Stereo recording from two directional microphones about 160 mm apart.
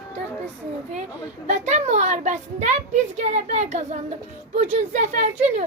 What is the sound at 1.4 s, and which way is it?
Speech, 45° right (ahead or behind).